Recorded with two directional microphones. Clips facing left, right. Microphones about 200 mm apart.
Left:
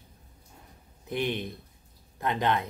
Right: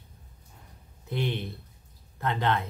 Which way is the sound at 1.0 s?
15° left (ahead or behind).